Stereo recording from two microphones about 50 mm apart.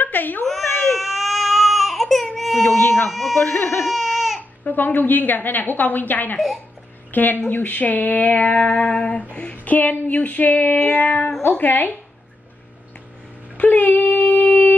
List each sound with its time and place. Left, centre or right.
0.0 s baby cry: left
0.9 s baby cry: centre
2.8 s baby cry: left
3.1 s speech: centre
3.3 s speech: left
3.8 s baby cry: centre
4.4 s speech: left
9.8 s speech: left
13.6 s female singing: left